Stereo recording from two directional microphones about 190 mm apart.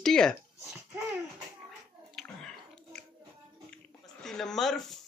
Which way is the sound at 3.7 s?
5° left (ahead or behind).